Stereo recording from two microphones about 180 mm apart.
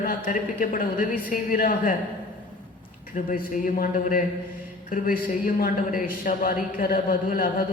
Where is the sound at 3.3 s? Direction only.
50° left (ahead or behind).